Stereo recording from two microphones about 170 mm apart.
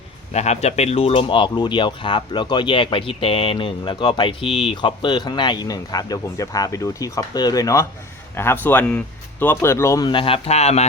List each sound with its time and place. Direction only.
0.3 s speech: 40° left (ahead or behind); by 10.1 s 15° left (ahead or behind)
10.1 s a man's voice: 30° left (ahead or behind)